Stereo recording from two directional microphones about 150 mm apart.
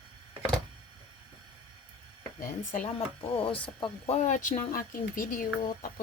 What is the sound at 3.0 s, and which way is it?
Speech, 40° left (ahead or behind).